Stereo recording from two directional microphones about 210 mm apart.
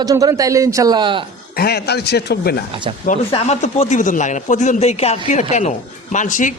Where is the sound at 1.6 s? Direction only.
50° left (ahead or behind).